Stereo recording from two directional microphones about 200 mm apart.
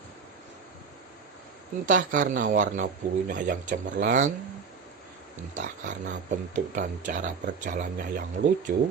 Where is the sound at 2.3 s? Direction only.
40° right (ahead or behind).